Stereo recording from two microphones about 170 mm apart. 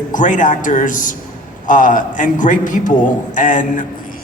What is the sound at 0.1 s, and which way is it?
Speech, 50° left (ahead or behind).